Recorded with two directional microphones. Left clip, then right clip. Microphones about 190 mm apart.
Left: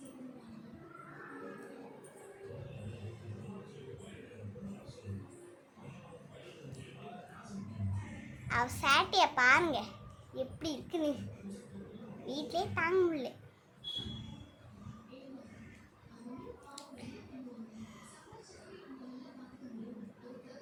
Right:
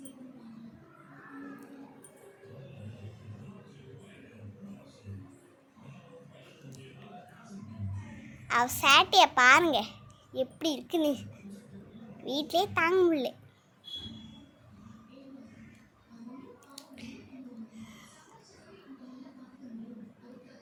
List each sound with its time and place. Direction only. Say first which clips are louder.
8.4 s a child's voice: right 6 dB; 35° right (ahead or behind)
12.2 s a child's voice: right 8 dB; 40° right (ahead or behind)
16.9 s a sound: right 2 dB; 35° right (ahead or behind)